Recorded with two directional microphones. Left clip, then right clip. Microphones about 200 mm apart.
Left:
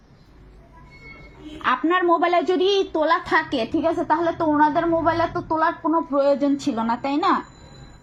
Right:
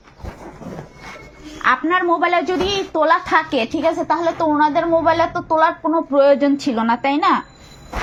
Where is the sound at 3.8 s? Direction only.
35° right (ahead or behind).